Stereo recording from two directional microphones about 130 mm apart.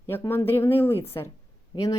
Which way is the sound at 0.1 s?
15° left (ahead or behind).